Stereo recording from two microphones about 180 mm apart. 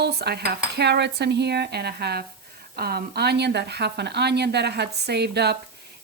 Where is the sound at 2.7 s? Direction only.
60° right (ahead or behind).